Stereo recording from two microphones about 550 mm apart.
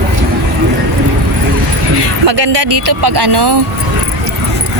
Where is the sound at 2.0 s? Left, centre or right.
Right.